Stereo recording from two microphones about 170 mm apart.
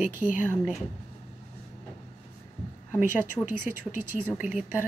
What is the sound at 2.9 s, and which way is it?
A woman's voice, 10° right (ahead or behind).